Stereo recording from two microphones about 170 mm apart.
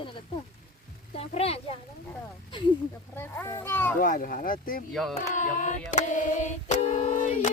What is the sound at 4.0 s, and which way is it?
Speech, 55° left (ahead or behind).